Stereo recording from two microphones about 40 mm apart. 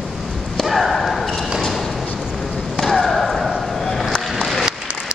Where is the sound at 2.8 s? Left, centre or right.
Centre.